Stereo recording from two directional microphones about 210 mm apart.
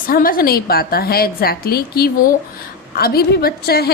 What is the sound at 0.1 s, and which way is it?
A woman's voice, 45° left (ahead or behind).